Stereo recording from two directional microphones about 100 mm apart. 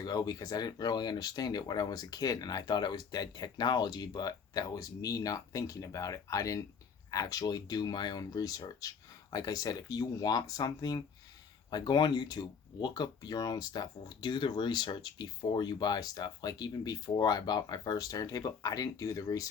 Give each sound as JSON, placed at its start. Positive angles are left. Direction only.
{"t": 0.0, "sound": "speech", "side_deg": 40}